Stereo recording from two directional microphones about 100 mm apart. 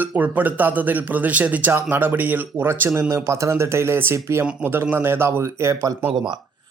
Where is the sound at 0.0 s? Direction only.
15° right (ahead or behind).